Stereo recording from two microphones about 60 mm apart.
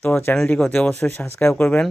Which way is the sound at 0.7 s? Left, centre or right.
Left.